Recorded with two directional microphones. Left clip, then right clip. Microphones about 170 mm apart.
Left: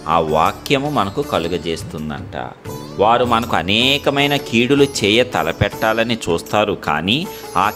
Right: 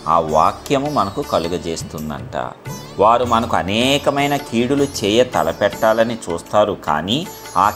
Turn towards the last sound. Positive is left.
turn(degrees=35)  # may be behind; listen again after turning